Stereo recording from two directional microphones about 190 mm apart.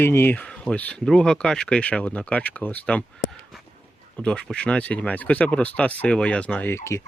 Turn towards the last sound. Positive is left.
turn(degrees=15)  # may be behind; listen again after turning